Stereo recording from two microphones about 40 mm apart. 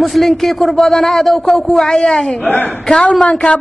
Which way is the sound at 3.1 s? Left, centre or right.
Left.